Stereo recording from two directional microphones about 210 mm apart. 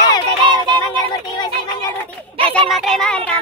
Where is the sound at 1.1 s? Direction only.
20° left (ahead or behind).